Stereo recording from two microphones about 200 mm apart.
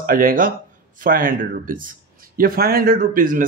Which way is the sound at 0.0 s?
45° right (ahead or behind).